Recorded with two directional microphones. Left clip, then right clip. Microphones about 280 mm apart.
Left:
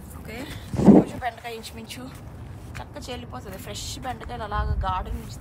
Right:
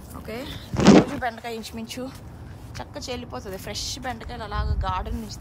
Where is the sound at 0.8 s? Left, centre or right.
Left.